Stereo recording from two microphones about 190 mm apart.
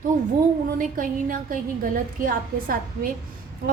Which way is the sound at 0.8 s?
45° right (ahead or behind).